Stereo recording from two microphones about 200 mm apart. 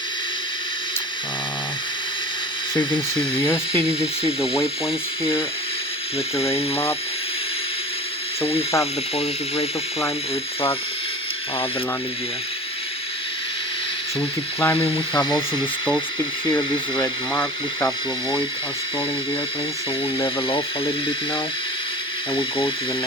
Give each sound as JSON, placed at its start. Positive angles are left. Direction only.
{"t": 2.7, "sound": "speech", "side_deg": 25}
{"t": 6.3, "sound": "speech", "side_deg": 30}
{"t": 8.4, "sound": "speech", "side_deg": 30}
{"t": 14.2, "sound": "speech", "side_deg": 10}
{"t": 14.8, "sound": "speech", "side_deg": 20}
{"t": 17.3, "sound": "speech", "side_deg": 10}
{"t": 20.2, "sound": "speech", "side_deg": 25}
{"t": 22.4, "sound": "speech", "side_deg": 25}